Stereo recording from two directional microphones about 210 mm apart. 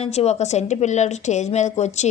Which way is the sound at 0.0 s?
30° left (ahead or behind).